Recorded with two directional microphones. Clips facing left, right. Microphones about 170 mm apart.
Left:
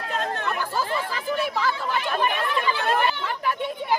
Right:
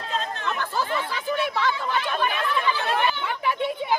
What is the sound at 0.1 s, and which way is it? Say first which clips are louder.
Chatter: left 2 dB; 55° left (ahead or behind).